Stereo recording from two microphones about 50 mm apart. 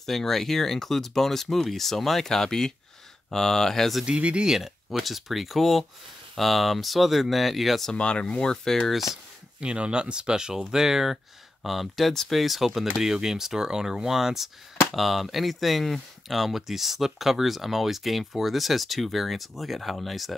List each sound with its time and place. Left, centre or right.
0.0 s speech: centre
4.0 s speech: right
4.5 s speech: centre
7.9 s speech: left
9.6 s speech: centre